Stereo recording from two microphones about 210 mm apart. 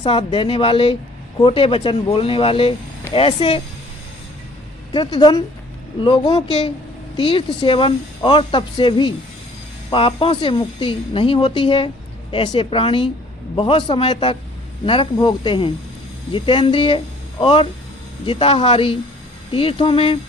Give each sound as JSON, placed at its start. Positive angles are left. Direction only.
{"t": 0.0, "sound": "speech", "side_deg": 20}
{"t": 4.9, "sound": "speech", "side_deg": 20}